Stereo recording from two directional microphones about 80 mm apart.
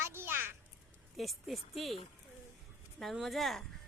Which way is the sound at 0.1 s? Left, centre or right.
Right.